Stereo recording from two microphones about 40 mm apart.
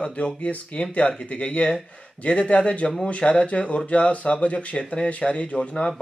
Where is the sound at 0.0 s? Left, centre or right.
Left.